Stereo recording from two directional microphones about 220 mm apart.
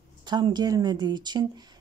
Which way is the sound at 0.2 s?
20° right (ahead or behind).